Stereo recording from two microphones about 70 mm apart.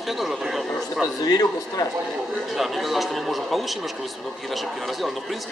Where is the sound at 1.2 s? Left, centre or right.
Left.